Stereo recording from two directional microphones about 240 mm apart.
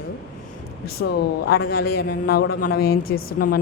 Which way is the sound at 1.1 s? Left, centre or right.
Left.